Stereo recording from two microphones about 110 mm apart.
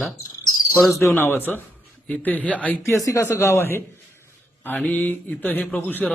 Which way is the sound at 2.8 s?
25° left (ahead or behind).